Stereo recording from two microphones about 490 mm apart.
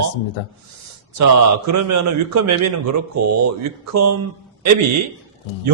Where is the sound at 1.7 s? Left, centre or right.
Right.